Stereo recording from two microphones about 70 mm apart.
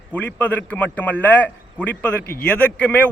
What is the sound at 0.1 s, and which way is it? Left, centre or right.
A man's voice, left.